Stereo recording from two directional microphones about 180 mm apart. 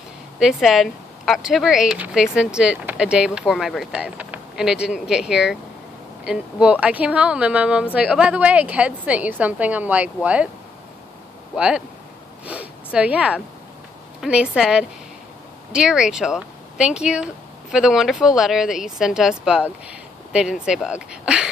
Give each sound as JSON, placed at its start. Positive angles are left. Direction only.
{"t": 0.4, "sound": "a woman's voice", "side_deg": 0}
{"t": 11.5, "sound": "speech", "side_deg": -5}